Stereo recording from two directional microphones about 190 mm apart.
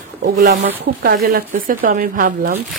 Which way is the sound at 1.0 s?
55° right (ahead or behind).